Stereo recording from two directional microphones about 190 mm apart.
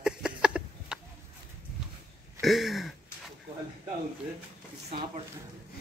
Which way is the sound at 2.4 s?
Centre (ahead or behind).